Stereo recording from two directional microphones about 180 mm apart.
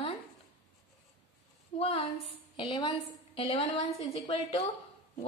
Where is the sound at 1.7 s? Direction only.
35° left (ahead or behind).